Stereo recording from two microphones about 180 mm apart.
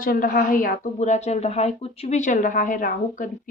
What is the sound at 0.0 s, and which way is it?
Speech, 50° left (ahead or behind).